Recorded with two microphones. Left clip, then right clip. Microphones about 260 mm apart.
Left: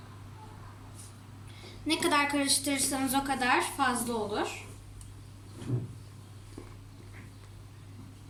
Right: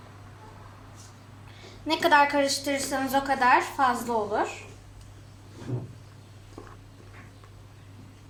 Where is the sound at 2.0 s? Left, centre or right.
Centre.